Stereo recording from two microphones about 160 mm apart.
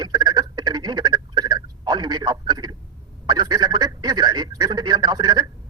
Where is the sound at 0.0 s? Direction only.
25° right (ahead or behind).